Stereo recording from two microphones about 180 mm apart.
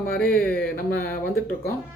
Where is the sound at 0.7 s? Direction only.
55° left (ahead or behind).